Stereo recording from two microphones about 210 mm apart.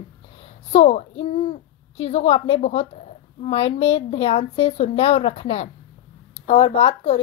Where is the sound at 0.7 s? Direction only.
30° left (ahead or behind).